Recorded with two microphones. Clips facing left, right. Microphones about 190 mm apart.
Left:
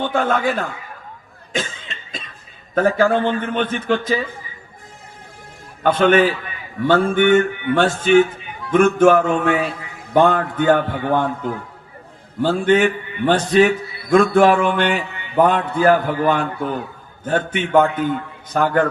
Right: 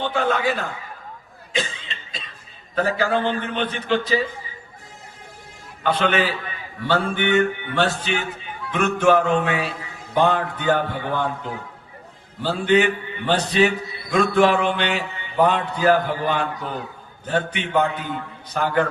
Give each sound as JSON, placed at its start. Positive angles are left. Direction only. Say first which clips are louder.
{"t": 0.0, "sound": "a man's voice", "louder": "left 3 dB", "side_deg": 50}
{"t": 1.5, "sound": "cough", "louder": "left 1 dB", "side_deg": 45}
{"t": 2.7, "sound": "a man's voice", "louder": "left 5 dB", "side_deg": 45}
{"t": 5.8, "sound": "a man's voice", "louder": "left 7 dB", "side_deg": 45}
{"t": 12.4, "sound": "a man's voice", "louder": "left 3 dB", "side_deg": 50}